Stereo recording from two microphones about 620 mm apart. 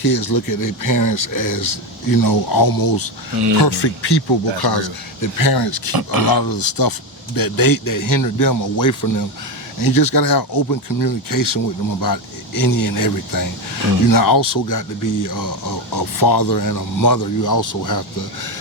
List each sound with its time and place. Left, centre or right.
0.0 s speech: left
5.2 s speech: left
6.0 s speech: right
6.3 s speech: left